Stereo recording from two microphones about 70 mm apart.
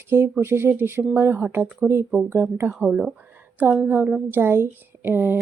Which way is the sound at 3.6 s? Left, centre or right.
Right.